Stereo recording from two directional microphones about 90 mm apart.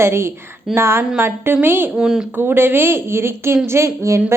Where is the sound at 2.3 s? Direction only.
25° right (ahead or behind).